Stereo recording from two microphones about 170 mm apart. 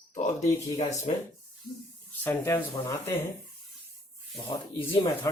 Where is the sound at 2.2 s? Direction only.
15° left (ahead or behind).